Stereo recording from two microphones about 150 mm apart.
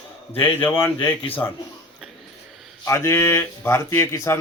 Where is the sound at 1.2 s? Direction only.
30° left (ahead or behind).